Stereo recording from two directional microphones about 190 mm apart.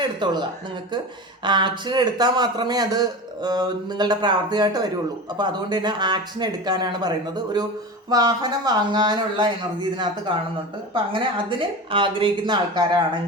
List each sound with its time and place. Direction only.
0.0 s a man's voice: 25° right (ahead or behind)
1.5 s a man's voice: 25° right (ahead or behind)
8.1 s a man's voice: 20° right (ahead or behind)